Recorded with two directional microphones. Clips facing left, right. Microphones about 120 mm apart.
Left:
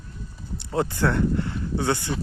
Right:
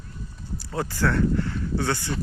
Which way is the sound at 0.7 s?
20° left (ahead or behind).